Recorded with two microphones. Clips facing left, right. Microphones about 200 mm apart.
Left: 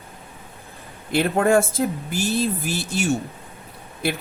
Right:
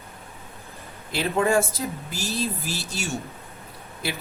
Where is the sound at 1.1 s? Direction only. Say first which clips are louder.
Left 4 dB; 55° left (ahead or behind).